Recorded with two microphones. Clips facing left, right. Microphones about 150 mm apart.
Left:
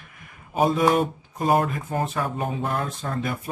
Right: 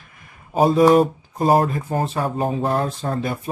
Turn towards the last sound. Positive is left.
turn(degrees=-35)  # may be behind; listen again after turning